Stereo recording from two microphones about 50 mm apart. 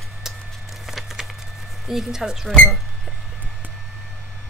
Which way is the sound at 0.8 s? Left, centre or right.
Centre.